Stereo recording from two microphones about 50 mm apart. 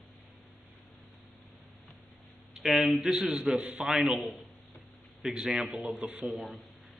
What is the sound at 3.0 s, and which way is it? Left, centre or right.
Speech, centre.